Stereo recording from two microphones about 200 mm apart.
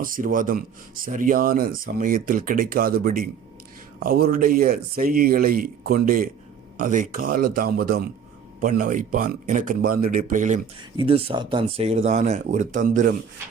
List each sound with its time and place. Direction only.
0.0 s speech: 45° right (ahead or behind)
10.9 s speech: 25° right (ahead or behind)